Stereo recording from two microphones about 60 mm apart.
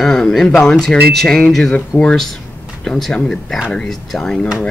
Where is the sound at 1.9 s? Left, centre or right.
Left.